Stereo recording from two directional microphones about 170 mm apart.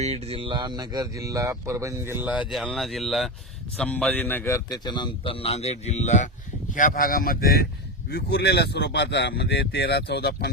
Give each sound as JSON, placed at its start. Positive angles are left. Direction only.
{"t": 0.0, "sound": "a man's voice", "side_deg": -35}
{"t": 8.1, "sound": "speech", "side_deg": 70}